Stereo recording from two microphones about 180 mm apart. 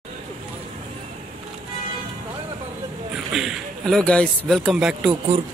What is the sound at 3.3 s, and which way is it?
Speech, centre (ahead or behind).